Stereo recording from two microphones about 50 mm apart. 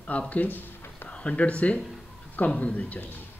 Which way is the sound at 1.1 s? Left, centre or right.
Left.